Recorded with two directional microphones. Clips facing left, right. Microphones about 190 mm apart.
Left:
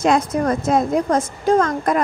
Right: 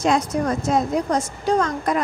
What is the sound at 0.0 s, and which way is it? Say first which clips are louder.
Speech: left 3 dB; 75° left (ahead or behind).